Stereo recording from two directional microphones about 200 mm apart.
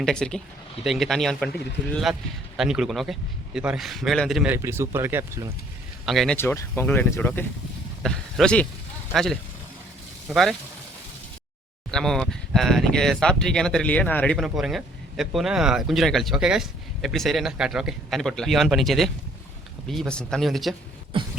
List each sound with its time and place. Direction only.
0.0 s speech: 5° left (ahead or behind); by 5.5 s 10° right (ahead or behind)
6.1 s speech: centre (ahead or behind)
6.3 s speech: 10° left (ahead or behind)
11.9 s speech: centre (ahead or behind)
21.1 s a sound: 25° right (ahead or behind)